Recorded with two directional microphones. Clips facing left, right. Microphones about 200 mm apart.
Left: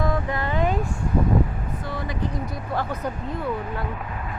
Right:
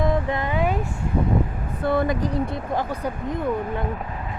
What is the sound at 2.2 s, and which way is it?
Speech, 30° right (ahead or behind).